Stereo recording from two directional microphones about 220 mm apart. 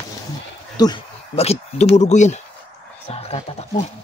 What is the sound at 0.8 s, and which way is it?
Speech, 25° left (ahead or behind).